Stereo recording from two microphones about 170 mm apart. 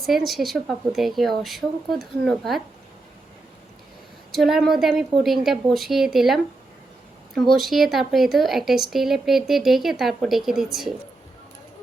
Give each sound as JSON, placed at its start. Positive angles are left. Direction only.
{"t": 0.0, "sound": "speech", "side_deg": 0}
{"t": 4.3, "sound": "speech", "side_deg": 0}
{"t": 7.5, "sound": "speech", "side_deg": 0}